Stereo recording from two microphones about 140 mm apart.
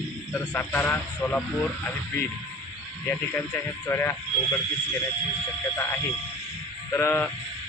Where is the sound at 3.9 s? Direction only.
15° left (ahead or behind).